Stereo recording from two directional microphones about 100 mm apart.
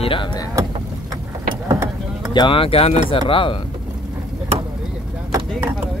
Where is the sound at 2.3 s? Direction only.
55° left (ahead or behind).